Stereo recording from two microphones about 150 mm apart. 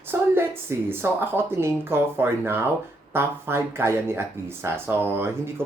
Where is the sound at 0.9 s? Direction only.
15° right (ahead or behind).